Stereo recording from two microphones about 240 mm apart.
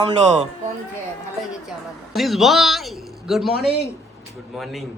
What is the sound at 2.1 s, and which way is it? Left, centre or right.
A man's voice, centre.